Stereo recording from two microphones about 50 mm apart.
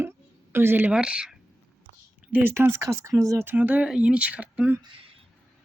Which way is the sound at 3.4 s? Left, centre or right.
Right.